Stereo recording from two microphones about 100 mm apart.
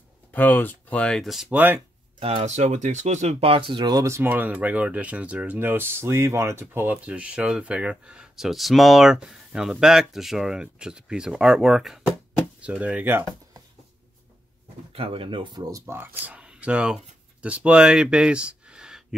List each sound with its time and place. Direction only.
0.3 s speech: 20° left (ahead or behind); by 1.5 s centre (ahead or behind)
1.5 s speech: 20° right (ahead or behind)
2.1 s speech: 70° right (ahead or behind)
3.2 s speech: 90° right; by 4.0 s 50° right (ahead or behind)
4.0 s speech: 30° right (ahead or behind)
4.3 s speech: 15° right (ahead or behind)
12.5 s speech: 15° right (ahead or behind)
14.9 s speech: 60° right (ahead or behind); by 19.0 s 5° right (ahead or behind)